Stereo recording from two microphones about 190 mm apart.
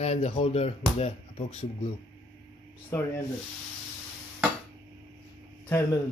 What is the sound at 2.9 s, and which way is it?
Speech, 15° left (ahead or behind).